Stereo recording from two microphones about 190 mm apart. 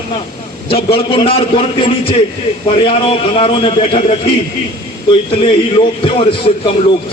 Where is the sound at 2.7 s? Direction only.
25° left (ahead or behind).